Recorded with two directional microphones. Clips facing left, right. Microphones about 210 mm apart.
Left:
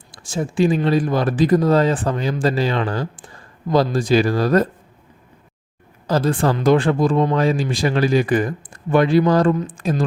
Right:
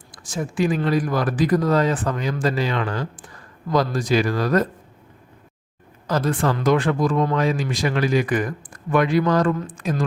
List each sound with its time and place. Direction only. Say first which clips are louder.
0.1 s speech: left 3 dB; 25° left (ahead or behind)
6.1 s speech: left 3 dB; 30° left (ahead or behind)